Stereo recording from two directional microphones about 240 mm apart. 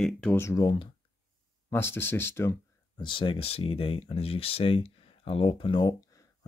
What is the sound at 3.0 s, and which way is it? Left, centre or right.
Speech, left.